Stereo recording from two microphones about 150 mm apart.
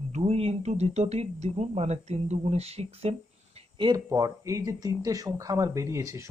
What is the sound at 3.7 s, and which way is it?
Speech, 25° right (ahead or behind).